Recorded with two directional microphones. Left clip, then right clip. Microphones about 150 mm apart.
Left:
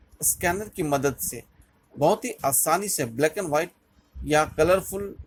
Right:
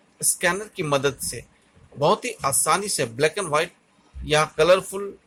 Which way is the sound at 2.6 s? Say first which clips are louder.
Right 4 dB; 35° left (ahead or behind).